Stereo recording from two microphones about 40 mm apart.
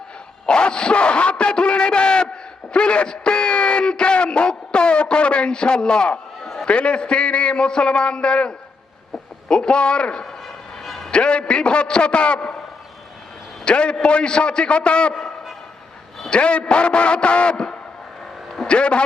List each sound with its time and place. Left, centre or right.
0.4 s a man's voice: left
10.8 s a sound: centre
11.1 s a man's voice: left
13.7 s a man's voice: left
15.1 s a sound: centre
16.3 s a man's voice: left